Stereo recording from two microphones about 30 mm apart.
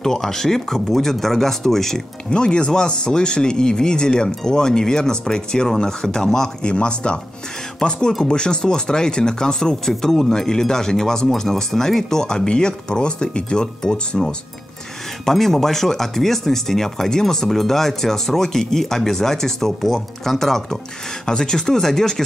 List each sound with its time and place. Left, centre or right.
0.0 s speech: centre
2.3 s speech: left
6.6 s speech: left
13.8 s speech: centre
15.2 s speech: centre